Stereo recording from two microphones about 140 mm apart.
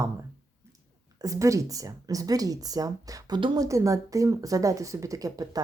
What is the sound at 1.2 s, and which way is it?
Speech, 25° right (ahead or behind).